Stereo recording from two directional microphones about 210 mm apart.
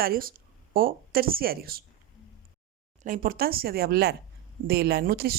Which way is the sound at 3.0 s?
40° right (ahead or behind).